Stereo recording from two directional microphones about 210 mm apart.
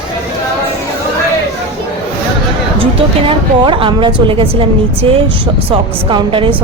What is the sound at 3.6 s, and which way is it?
A woman's voice, 25° right (ahead or behind).